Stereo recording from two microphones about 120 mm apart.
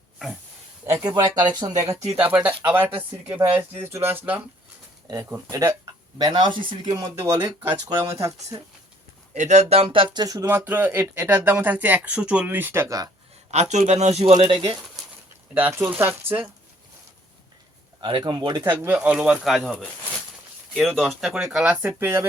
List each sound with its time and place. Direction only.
0.9 s speech: 35° right (ahead or behind)
2.1 s speech: 15° right (ahead or behind); by 7.1 s 40° right (ahead or behind)
7.2 s speech: 25° right (ahead or behind)
9.3 s speech: 75° right (ahead or behind); by 10.2 s 45° right (ahead or behind)
10.2 s speech: 25° right (ahead or behind)
13.5 s speech: 75° right (ahead or behind)
14.3 s speech: 40° right (ahead or behind)
15.5 s speech: 20° right (ahead or behind)
18.0 s speech: 40° right (ahead or behind)
18.6 s speech: 15° right (ahead or behind)